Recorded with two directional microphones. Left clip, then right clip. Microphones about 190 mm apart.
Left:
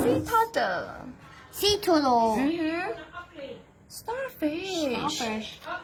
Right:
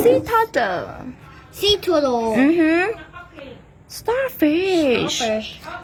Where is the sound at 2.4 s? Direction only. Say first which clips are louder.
Right 12 dB; 35° right (ahead or behind).